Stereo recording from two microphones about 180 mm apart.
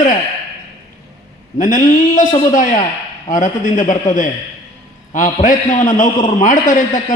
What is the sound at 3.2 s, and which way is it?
A man's voice, 45° left (ahead or behind).